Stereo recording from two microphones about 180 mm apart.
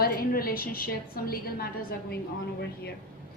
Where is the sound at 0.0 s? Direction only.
55° left (ahead or behind).